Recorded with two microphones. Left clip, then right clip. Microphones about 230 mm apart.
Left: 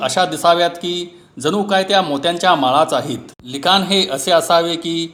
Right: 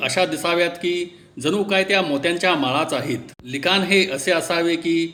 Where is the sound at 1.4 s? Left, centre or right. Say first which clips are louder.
Left 3 dB; centre.